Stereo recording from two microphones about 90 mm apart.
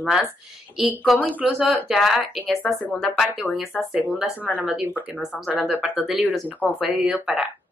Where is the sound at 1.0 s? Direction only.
Centre (ahead or behind).